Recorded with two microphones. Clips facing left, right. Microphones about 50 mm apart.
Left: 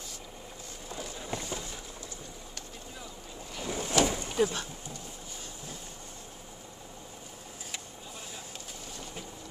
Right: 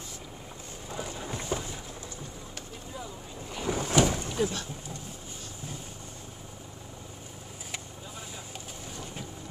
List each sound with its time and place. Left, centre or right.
0.8 s a sound: right
3.5 s boat: right
4.4 s speech: centre